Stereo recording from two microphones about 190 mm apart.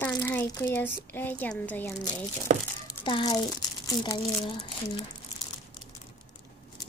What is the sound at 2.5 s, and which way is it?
Speech, 35° right (ahead or behind).